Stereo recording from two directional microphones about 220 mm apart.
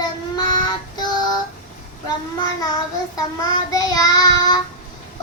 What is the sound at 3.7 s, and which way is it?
Child singing, 15° left (ahead or behind).